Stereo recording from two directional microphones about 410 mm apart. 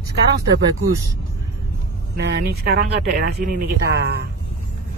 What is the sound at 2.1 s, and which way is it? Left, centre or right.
Speech, right.